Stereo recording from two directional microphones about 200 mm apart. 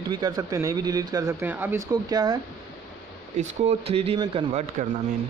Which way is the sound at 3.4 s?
30° right (ahead or behind).